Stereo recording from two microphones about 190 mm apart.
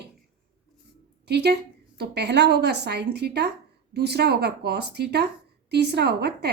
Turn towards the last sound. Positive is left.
turn(degrees=-60)  # may be behind; listen again after turning